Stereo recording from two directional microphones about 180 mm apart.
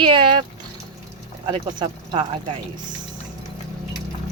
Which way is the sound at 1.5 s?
25° right (ahead or behind).